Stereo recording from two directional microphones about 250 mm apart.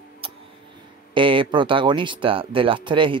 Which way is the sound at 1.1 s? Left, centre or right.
Centre.